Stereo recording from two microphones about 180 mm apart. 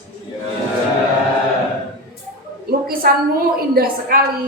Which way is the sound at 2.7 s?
55° right (ahead or behind).